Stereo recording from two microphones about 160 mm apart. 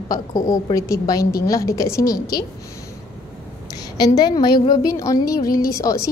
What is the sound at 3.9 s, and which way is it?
A woman's voice, 25° left (ahead or behind).